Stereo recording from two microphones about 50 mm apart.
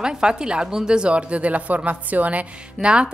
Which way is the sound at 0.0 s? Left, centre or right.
Centre.